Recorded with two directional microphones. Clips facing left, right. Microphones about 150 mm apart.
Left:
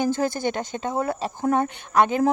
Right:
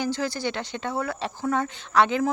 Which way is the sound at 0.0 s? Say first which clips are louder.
Left 4 dB; 50° left (ahead or behind).